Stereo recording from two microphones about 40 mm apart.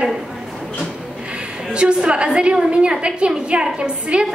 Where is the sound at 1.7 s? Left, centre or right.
Right.